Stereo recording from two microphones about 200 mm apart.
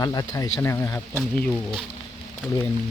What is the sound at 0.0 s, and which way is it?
Speech, 20° left (ahead or behind).